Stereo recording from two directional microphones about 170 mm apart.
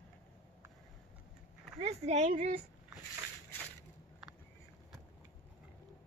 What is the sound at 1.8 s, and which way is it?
Speech, 40° right (ahead or behind).